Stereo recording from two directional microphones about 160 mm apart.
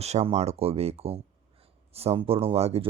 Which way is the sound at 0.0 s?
45° right (ahead or behind).